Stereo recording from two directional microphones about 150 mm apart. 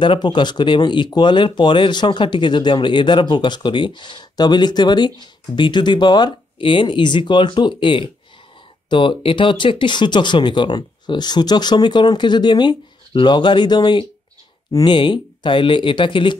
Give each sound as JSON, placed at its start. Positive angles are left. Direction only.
{"t": 0.0, "sound": "speech", "side_deg": 30}